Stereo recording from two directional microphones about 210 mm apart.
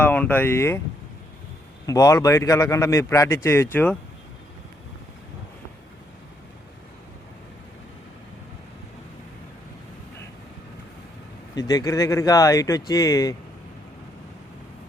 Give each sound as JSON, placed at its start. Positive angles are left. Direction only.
{"t": 0.0, "sound": "a man's voice", "side_deg": 10}
{"t": 1.9, "sound": "a man's voice", "side_deg": 15}
{"t": 11.5, "sound": "a man's voice", "side_deg": 15}